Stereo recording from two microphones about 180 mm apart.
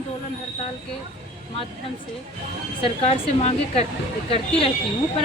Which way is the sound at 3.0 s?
35° left (ahead or behind).